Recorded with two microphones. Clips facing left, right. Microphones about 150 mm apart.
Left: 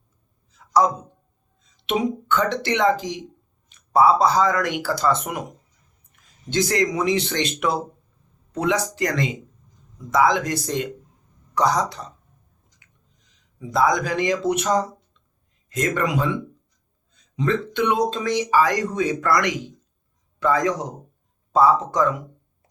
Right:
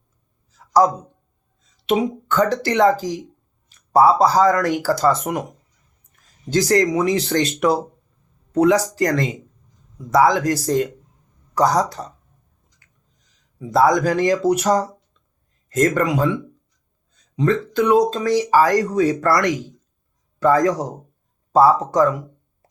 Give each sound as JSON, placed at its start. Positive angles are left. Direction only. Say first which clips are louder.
{"t": 1.9, "sound": "speech", "louder": "right 3 dB", "side_deg": -35}
{"t": 6.5, "sound": "speech", "louder": "right 5 dB", "side_deg": -40}
{"t": 13.6, "sound": "speech", "louder": "right 4 dB", "side_deg": -40}